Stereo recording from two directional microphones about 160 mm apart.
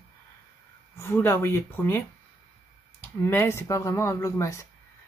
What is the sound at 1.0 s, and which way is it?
Speech, 15° left (ahead or behind).